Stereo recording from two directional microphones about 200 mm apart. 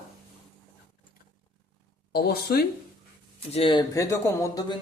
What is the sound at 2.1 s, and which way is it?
Speech, 50° left (ahead or behind).